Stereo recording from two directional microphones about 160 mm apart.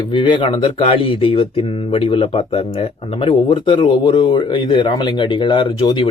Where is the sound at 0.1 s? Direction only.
30° left (ahead or behind).